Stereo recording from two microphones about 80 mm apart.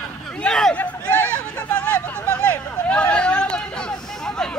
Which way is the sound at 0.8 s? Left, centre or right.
Centre.